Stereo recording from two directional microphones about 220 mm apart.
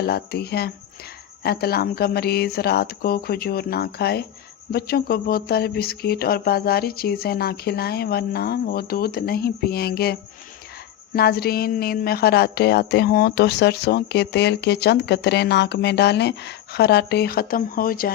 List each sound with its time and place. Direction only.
0.0 s speech: 45° left (ahead or behind)